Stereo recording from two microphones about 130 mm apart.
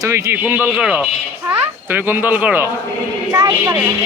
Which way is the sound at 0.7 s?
5° right (ahead or behind).